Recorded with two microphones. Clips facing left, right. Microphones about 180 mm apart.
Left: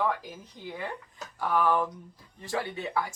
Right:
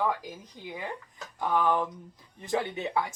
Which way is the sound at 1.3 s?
20° right (ahead or behind).